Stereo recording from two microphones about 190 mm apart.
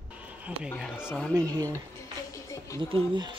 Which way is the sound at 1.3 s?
20° right (ahead or behind).